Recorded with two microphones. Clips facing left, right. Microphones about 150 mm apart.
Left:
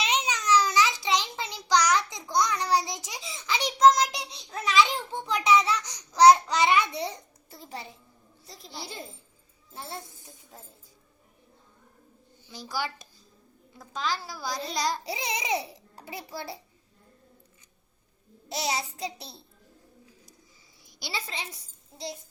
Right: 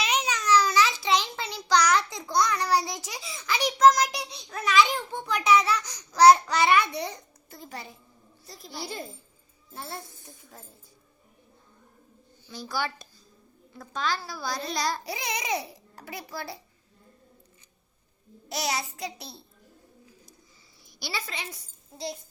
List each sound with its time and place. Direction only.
0.0 s a sound: 25° left (ahead or behind)
12.5 s a child's voice: 15° left (ahead or behind)
15.1 s speech: 30° left (ahead or behind)
18.4 s speech: 30° left (ahead or behind)
21.0 s speech: 25° left (ahead or behind)